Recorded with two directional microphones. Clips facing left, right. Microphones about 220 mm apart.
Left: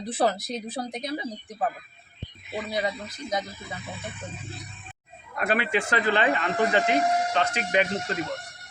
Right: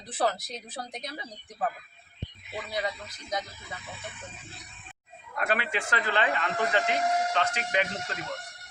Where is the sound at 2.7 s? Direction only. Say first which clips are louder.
Left 3 dB; 15° left (ahead or behind).